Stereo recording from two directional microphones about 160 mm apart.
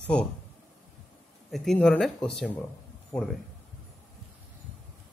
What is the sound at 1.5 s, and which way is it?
A man's voice, centre (ahead or behind).